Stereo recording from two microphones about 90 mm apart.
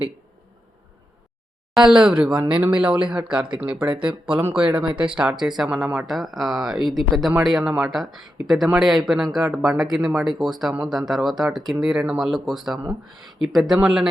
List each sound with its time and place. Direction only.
1.7 s speech: 10° right (ahead or behind)
6.1 s speech: centre (ahead or behind)
7.6 s speech: 15° right (ahead or behind)
7.9 s speech: 5° right (ahead or behind)